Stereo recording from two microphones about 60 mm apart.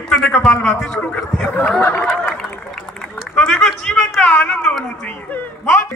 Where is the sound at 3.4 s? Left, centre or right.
Centre.